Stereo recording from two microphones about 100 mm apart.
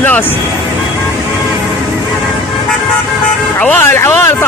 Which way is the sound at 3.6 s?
20° left (ahead or behind).